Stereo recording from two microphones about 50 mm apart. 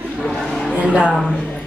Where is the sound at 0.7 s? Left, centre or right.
Right.